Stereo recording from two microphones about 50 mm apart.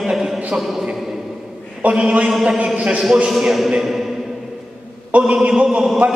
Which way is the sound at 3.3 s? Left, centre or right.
Centre.